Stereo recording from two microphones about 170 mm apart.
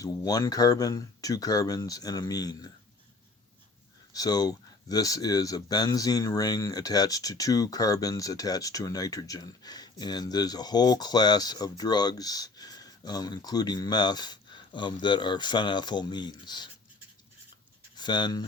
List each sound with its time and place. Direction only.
0.0 s speech: 20° left (ahead or behind)
4.1 s speech: 20° left (ahead or behind)
17.9 s speech: 25° left (ahead or behind)